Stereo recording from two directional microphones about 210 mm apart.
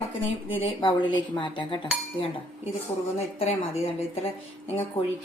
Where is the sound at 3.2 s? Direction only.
30° left (ahead or behind).